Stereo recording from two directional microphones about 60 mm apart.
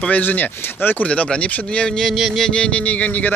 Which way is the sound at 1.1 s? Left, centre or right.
Centre.